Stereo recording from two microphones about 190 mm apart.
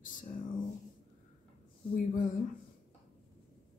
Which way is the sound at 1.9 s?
45° left (ahead or behind).